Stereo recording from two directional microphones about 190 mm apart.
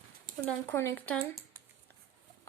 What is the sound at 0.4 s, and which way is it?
Speech, 10° left (ahead or behind).